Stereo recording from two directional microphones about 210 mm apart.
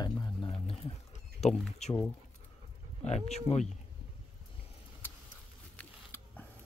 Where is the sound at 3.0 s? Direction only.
30° left (ahead or behind).